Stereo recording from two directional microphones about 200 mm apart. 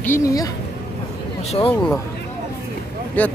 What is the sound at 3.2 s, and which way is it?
Speech, 10° left (ahead or behind).